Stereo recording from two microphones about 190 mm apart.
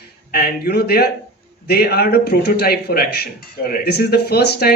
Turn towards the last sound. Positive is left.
turn(degrees=60)  # may be behind; listen again after turning